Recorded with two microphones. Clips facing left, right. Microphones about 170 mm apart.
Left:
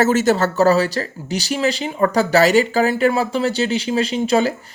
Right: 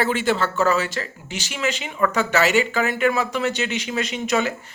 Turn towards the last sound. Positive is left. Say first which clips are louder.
# left 6 dB
turn(degrees=30)  # may be behind; listen again after turning